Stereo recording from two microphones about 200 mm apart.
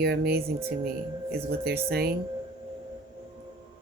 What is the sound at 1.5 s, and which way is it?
Speech, 50° right (ahead or behind).